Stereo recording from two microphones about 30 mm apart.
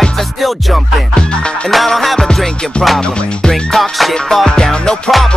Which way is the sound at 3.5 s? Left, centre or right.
Centre.